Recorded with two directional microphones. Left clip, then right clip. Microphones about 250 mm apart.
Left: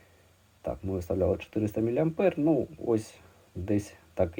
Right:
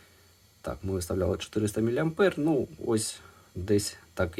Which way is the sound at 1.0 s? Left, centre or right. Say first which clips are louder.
Left 3 dB; right.